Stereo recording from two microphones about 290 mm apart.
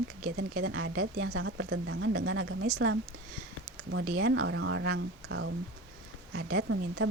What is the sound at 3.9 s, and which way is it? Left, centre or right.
Speech, right.